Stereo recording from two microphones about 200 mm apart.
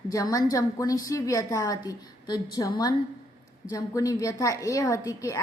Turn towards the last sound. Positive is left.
turn(degrees=15)  # may be behind; listen again after turning